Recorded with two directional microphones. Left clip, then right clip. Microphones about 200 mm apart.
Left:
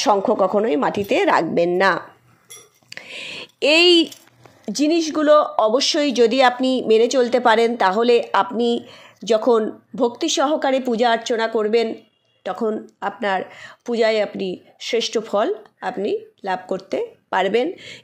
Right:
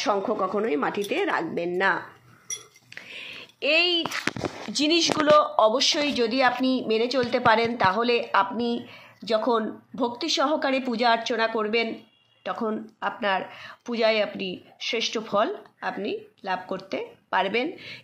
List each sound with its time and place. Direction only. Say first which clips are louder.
0.0 s a woman's voice: left 8 dB; 35° left (ahead or behind)
2.9 s a sound: left 7 dB; 45° left (ahead or behind)
4.7 s a woman's voice: left 3 dB; 15° left (ahead or behind)